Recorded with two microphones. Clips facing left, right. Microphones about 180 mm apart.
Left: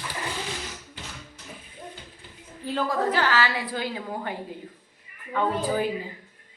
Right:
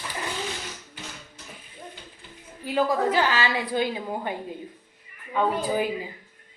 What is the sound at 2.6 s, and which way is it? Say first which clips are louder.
A woman's voice: right 3 dB; 15° right (ahead or behind).